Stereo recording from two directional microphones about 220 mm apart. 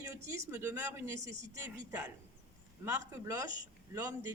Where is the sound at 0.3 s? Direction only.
15° right (ahead or behind).